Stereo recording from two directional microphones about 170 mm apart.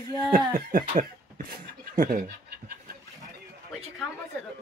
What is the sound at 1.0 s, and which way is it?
Speech, 60° right (ahead or behind).